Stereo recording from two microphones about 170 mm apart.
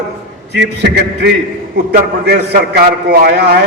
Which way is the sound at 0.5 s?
90° right.